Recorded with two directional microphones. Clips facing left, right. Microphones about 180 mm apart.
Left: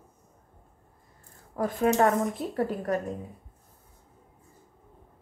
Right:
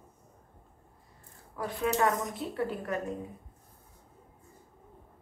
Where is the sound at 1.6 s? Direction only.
45° left (ahead or behind).